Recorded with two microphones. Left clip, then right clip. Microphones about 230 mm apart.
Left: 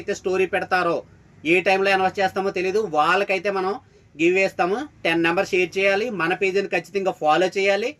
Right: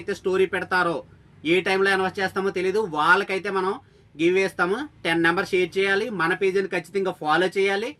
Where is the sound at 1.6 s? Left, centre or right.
Centre.